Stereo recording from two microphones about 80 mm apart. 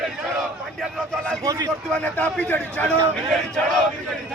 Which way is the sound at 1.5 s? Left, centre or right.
Right.